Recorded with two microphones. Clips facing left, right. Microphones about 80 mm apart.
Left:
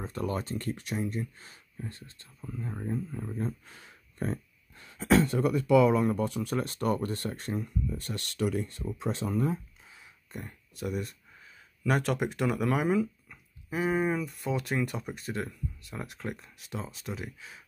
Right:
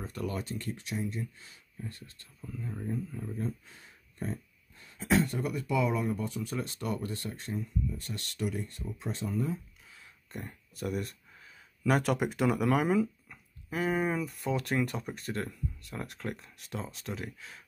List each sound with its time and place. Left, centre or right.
0.0 s speech: left
3.6 s speech: left
10.3 s speech: centre